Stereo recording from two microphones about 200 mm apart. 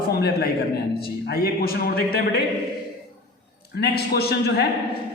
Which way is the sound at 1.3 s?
50° left (ahead or behind).